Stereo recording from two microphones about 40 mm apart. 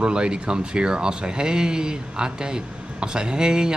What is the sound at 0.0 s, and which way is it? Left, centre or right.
Speech, right.